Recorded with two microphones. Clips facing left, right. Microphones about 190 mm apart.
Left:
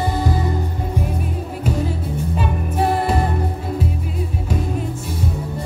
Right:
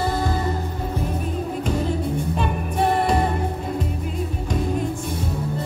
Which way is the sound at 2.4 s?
5° left (ahead or behind).